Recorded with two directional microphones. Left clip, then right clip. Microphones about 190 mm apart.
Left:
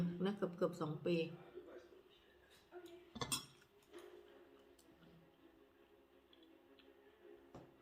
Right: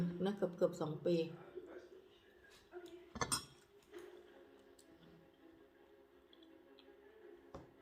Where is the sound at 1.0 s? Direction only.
40° right (ahead or behind).